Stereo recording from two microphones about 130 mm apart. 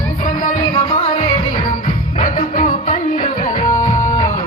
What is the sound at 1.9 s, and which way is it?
Music, 90° left.